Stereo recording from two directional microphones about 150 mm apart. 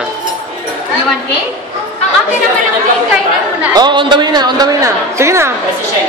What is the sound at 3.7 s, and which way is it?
A woman's voice, 30° right (ahead or behind).